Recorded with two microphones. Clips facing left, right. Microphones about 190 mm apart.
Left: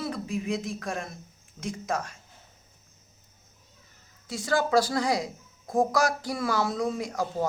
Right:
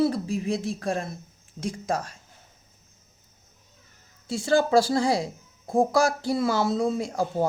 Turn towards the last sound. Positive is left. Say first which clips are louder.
# right 4 dB
turn(degrees=-30)  # may be behind; listen again after turning